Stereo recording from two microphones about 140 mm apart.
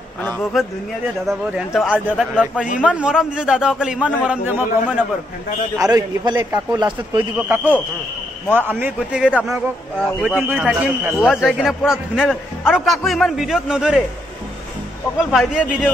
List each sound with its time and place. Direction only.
0.2 s a man's voice: 10° left (ahead or behind); by 5.0 s 10° right (ahead or behind)
5.8 s a man's voice: 25° right (ahead or behind); by 9.5 s 10° right (ahead or behind)
10.5 s a man's voice: 10° right (ahead or behind)
15.1 s a man's voice: 5° right (ahead or behind)